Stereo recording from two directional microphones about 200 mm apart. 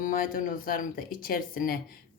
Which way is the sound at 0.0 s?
45° left (ahead or behind).